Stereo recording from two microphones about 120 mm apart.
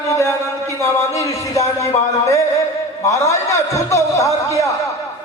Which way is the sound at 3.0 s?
25° left (ahead or behind).